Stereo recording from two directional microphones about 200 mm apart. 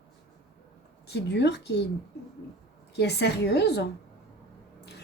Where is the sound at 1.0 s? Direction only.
55° left (ahead or behind).